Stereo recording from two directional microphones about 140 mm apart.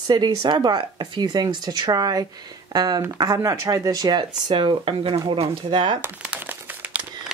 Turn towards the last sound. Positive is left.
turn(degrees=-10)  # may be behind; listen again after turning